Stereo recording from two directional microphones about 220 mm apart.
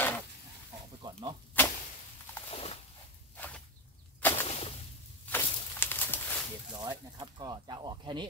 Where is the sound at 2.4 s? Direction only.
25° left (ahead or behind).